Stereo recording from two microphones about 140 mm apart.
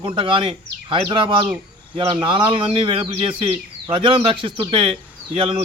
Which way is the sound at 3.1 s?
45° right (ahead or behind).